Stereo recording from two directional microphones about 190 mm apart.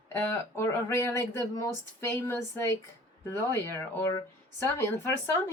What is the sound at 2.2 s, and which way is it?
Speech, 15° left (ahead or behind).